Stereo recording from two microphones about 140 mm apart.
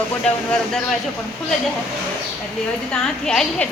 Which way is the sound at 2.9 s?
5° left (ahead or behind).